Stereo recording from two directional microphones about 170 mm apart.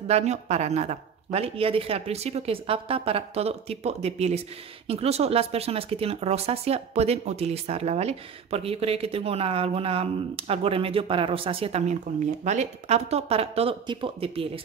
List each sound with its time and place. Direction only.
0.1 s speech: 40° right (ahead or behind)